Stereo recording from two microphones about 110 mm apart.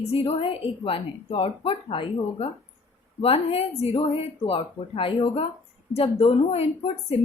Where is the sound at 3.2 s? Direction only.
65° left (ahead or behind).